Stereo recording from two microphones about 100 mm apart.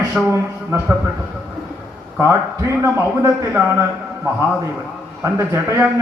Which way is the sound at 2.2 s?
25° right (ahead or behind).